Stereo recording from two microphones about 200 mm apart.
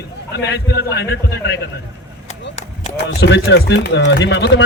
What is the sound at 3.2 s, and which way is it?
A man's voice, 60° left (ahead or behind).